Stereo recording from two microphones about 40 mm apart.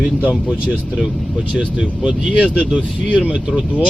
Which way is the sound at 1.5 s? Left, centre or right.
Right.